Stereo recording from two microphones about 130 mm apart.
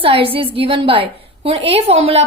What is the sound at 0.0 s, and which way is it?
A woman's voice, 45° right (ahead or behind).